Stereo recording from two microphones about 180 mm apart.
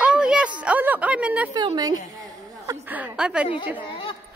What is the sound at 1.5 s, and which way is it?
Speech, 25° right (ahead or behind).